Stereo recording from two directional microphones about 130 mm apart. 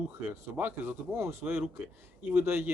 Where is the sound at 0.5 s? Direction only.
15° right (ahead or behind).